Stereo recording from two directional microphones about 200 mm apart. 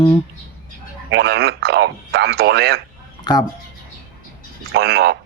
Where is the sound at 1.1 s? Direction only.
55° right (ahead or behind).